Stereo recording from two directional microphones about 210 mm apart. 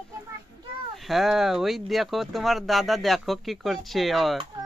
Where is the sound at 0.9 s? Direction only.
Centre (ahead or behind).